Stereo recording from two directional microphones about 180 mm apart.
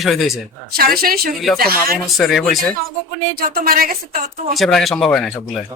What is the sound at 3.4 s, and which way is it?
A woman's voice, 55° right (ahead or behind).